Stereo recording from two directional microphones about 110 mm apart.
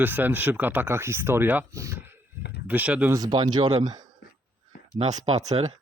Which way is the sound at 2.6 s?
10° right (ahead or behind).